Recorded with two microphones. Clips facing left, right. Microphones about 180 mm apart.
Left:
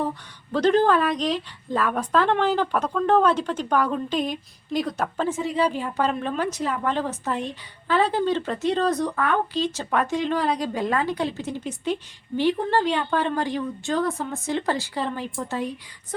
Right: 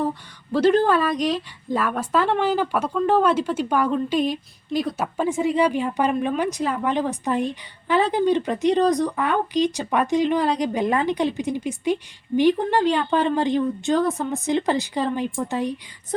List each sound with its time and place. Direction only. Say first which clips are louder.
0.5 s a woman's voice: right 1 dB; 10° right (ahead or behind)